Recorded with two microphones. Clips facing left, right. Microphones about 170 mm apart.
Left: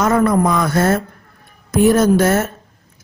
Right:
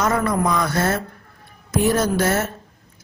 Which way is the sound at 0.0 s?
50° left (ahead or behind).